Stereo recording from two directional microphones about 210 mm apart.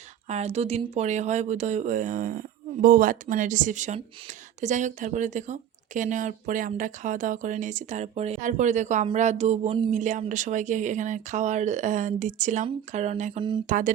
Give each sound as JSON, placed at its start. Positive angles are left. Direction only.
{"t": 0.3, "sound": "a woman's voice", "side_deg": -30}